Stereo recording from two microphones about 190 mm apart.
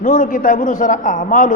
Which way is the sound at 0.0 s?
45° left (ahead or behind).